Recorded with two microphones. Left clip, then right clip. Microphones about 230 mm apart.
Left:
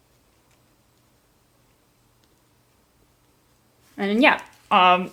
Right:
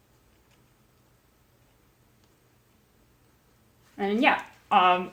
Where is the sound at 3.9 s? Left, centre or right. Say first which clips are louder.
Left 5 dB; left.